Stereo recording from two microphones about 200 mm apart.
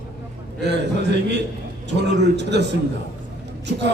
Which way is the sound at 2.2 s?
60° right (ahead or behind).